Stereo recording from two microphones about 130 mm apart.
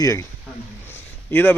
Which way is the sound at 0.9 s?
15° left (ahead or behind).